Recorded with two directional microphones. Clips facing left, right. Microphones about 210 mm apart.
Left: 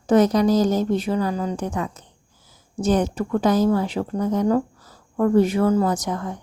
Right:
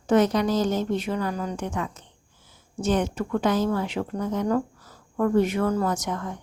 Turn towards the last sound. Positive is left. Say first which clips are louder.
# left 3 dB
turn(degrees=35)  # may be behind; listen again after turning